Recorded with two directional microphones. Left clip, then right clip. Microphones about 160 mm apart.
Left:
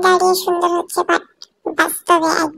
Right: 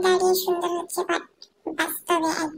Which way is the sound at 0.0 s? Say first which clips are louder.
Left 7 dB; 40° left (ahead or behind).